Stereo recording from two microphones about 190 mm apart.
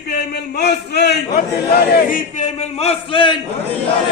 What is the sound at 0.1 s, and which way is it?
A man's voice, 60° left (ahead or behind).